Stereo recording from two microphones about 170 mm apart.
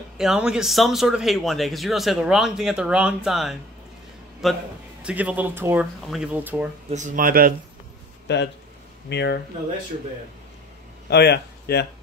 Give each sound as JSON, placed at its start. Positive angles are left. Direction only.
{"t": 0.2, "sound": "a man's voice", "side_deg": -5}
{"t": 6.9, "sound": "speech", "side_deg": -45}
{"t": 8.3, "sound": "speech", "side_deg": 90}
{"t": 9.1, "sound": "speech", "side_deg": 80}
{"t": 11.1, "sound": "speech", "side_deg": 75}